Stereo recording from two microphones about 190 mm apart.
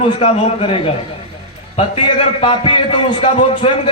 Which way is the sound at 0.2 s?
30° left (ahead or behind).